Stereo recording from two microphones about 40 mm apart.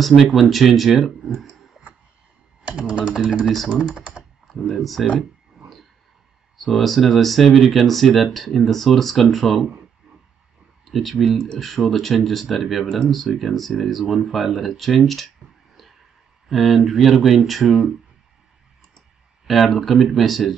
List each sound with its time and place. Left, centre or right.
0.2 s speech: centre
2.9 s speech: right
3.3 s speech: centre
3.9 s speech: centre
4.5 s speech: centre
6.6 s speech: centre
10.9 s speech: centre
16.4 s speech: centre
19.4 s speech: centre